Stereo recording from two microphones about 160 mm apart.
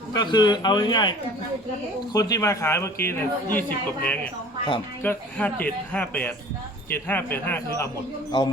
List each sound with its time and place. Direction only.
0.1 s a man's voice: 25° left (ahead or behind)
2.1 s speech: 20° left (ahead or behind)
8.3 s a man's voice: 30° left (ahead or behind)